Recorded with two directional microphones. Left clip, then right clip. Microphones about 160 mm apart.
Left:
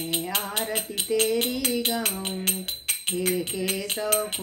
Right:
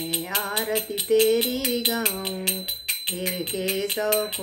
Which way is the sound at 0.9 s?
15° left (ahead or behind).